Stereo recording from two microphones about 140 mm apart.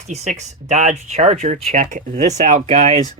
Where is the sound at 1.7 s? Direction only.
80° right; by 3.0 s 55° right (ahead or behind).